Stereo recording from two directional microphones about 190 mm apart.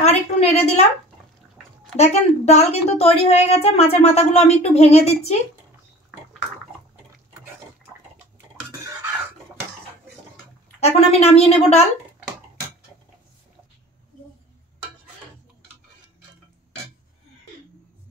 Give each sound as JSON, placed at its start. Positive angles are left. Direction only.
{"t": 0.0, "sound": "a sound", "side_deg": 35}
{"t": 2.0, "sound": "a woman's voice", "side_deg": 35}
{"t": 10.8, "sound": "a woman's voice", "side_deg": 35}